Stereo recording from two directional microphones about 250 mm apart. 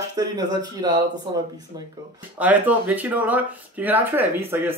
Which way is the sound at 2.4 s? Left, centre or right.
Centre.